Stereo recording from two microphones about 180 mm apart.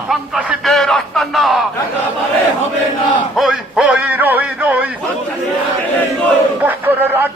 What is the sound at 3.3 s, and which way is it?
Music, centre (ahead or behind).